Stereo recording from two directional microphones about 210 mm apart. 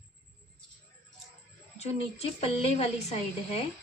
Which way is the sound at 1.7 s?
30° left (ahead or behind).